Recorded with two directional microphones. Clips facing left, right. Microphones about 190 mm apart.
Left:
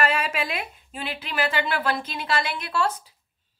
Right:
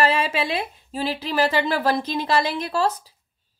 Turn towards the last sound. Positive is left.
turn(degrees=-35)  # may be behind; listen again after turning